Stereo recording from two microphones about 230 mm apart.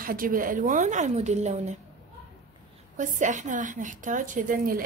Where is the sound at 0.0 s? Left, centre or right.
Right.